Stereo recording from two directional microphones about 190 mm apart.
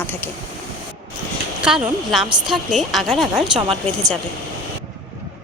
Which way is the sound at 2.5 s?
Centre (ahead or behind).